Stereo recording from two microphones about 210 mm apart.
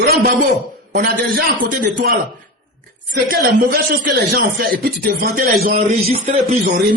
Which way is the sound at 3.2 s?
45° right (ahead or behind).